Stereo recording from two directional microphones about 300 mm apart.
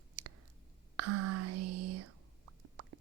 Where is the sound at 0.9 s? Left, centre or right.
Right.